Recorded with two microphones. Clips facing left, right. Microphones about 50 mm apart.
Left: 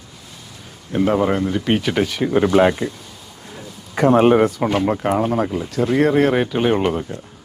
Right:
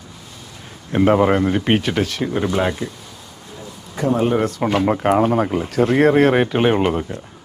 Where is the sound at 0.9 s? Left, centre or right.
Right.